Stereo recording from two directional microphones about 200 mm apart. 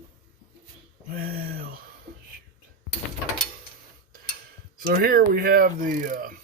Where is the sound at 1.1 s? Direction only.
45° right (ahead or behind).